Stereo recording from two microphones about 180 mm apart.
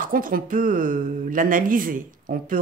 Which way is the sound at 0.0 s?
50° right (ahead or behind).